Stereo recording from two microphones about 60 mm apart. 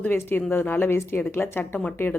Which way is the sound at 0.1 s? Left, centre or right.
Left.